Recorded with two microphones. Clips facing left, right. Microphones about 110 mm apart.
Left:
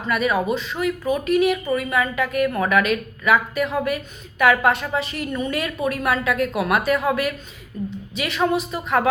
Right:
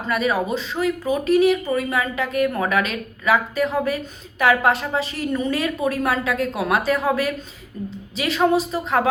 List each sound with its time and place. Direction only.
0.1 s a woman's voice: 35° right (ahead or behind)